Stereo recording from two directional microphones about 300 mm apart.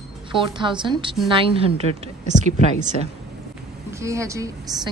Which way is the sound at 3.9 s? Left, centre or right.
Centre.